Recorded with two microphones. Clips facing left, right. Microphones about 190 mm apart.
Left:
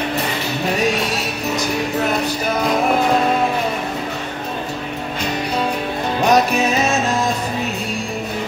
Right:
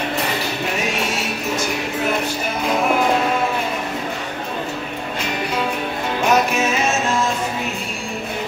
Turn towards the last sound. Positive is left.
turn(degrees=35)  # may be behind; listen again after turning